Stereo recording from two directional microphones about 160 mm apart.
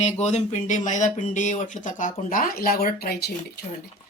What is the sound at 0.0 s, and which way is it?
Speech, 45° left (ahead or behind).